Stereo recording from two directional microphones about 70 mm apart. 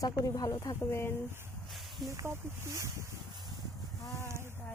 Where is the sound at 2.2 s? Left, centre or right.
Right.